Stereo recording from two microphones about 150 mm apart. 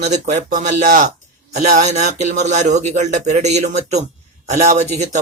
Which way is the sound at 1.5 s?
50° right (ahead or behind).